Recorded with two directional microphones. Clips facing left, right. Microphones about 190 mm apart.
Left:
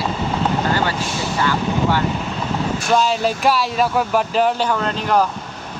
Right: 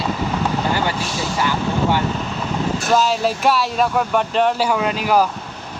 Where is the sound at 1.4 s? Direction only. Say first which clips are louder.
Left 1 dB; 15° right (ahead or behind).